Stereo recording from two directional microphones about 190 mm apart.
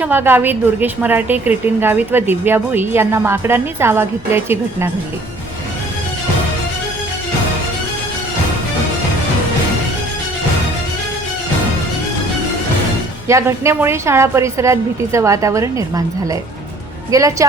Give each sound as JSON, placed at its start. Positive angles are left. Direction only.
{"t": 0.0, "sound": "a woman's voice", "side_deg": -10}
{"t": 13.2, "sound": "a woman's voice", "side_deg": -15}